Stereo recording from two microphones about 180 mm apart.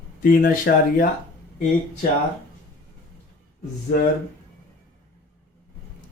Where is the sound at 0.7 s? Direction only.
60° left (ahead or behind).